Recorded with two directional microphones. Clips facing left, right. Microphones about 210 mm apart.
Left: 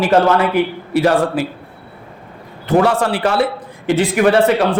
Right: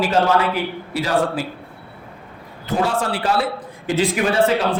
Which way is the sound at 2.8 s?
70° left (ahead or behind).